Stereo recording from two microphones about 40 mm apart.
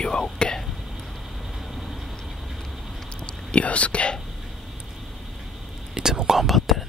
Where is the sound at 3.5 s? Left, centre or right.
Left.